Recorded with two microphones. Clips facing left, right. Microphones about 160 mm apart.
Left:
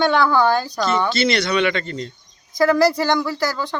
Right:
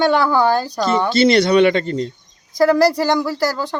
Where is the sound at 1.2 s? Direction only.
45° right (ahead or behind).